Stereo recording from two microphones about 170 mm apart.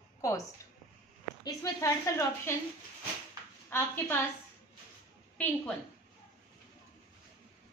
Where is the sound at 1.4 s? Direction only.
20° left (ahead or behind).